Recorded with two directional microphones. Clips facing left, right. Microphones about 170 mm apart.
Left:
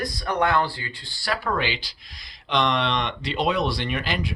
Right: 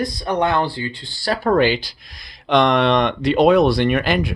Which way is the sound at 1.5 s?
45° right (ahead or behind).